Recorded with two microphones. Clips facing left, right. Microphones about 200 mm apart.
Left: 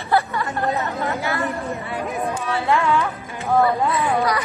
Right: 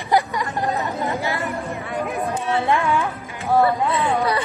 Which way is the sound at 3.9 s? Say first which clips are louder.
Even; 30° right (ahead or behind).